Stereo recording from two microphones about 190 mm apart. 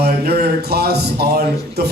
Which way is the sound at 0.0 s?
55° right (ahead or behind).